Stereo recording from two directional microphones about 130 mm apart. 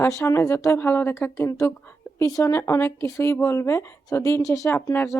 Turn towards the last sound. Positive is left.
turn(degrees=20)  # may be behind; listen again after turning